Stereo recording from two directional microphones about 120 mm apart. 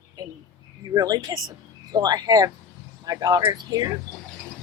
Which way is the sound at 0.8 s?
35° right (ahead or behind).